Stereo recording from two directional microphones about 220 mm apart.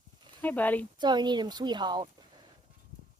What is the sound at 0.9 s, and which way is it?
Speech, 20° right (ahead or behind).